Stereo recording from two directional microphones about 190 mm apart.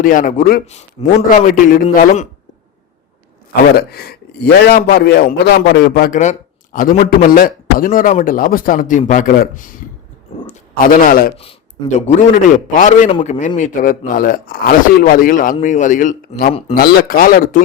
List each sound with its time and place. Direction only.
0.0 s a man's voice: 45° left (ahead or behind)
0.7 s a man's voice: 35° left (ahead or behind)
1.5 s a man's voice: 45° left (ahead or behind)
3.5 s a man's voice: 55° left (ahead or behind)
11.0 s a man's voice: 50° left (ahead or behind)
11.3 s a man's voice: 35° left (ahead or behind)
13.1 s a man's voice: 30° left (ahead or behind)
13.6 s a man's voice: 45° left (ahead or behind)
16.5 s a man's voice: 30° left (ahead or behind)
16.7 s a man's voice: 55° left (ahead or behind)